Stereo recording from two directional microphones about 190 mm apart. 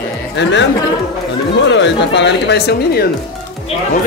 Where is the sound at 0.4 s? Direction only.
70° left (ahead or behind).